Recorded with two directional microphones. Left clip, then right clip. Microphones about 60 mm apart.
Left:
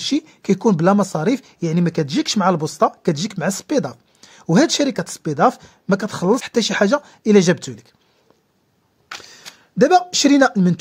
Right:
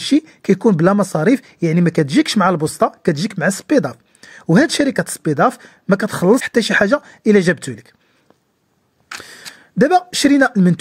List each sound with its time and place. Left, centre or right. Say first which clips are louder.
0.2 s speech: right 3 dB; right
3.0 s speech: right 3 dB; right
6.0 s speech: right 7 dB; right
9.8 s speech: even; right